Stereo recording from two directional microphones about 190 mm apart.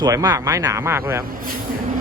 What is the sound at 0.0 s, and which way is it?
Speech, 20° right (ahead or behind).